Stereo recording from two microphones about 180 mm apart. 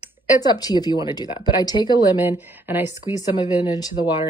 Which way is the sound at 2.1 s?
10° right (ahead or behind).